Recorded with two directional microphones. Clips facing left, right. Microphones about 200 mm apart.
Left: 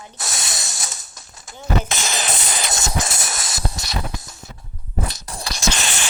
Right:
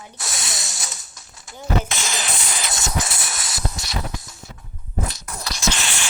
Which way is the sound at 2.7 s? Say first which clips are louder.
Even; 45° left (ahead or behind).